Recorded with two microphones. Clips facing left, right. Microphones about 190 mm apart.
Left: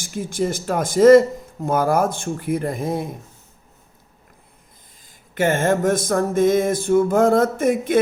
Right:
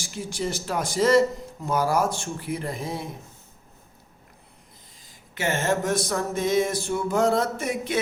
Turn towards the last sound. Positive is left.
turn(degrees=50)  # may be behind; listen again after turning